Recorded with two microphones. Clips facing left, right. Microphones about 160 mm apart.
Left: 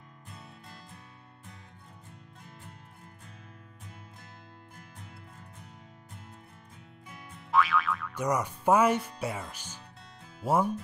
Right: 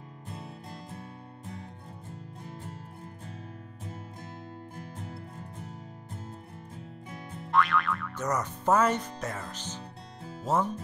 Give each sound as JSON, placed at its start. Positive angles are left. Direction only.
{"t": 0.3, "sound": "music", "side_deg": -35}
{"t": 4.7, "sound": "music", "side_deg": -35}
{"t": 7.1, "sound": "music", "side_deg": -35}
{"t": 7.5, "sound": "music", "side_deg": 0}
{"t": 8.2, "sound": "speech", "side_deg": 10}